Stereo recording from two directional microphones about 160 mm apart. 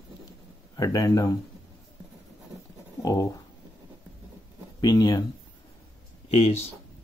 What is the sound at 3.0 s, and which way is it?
Speech, 20° left (ahead or behind).